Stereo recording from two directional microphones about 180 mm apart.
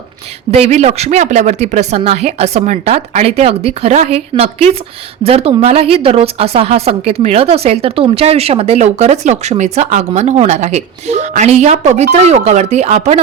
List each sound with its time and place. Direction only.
0.5 s speech: 35° right (ahead or behind)